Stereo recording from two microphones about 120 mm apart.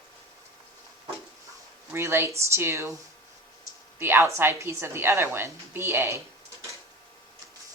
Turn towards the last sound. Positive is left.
turn(degrees=-20)  # may be behind; listen again after turning